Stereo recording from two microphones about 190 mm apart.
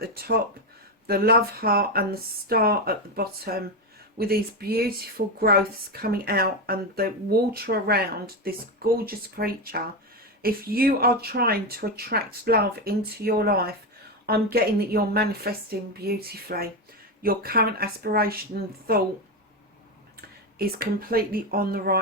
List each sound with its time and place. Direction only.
0.0 s a woman's voice: 55° right (ahead or behind)
20.6 s a woman's voice: 50° right (ahead or behind)